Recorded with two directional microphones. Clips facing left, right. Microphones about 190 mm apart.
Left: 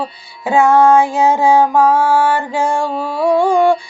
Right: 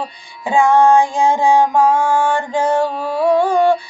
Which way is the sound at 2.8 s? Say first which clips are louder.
Right 1 dB; 40° right (ahead or behind).